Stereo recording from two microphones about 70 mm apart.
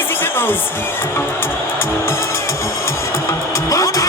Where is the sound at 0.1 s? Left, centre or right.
Left.